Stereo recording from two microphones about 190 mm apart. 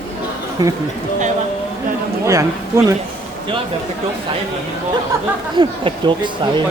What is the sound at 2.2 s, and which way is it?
Speech, 15° right (ahead or behind).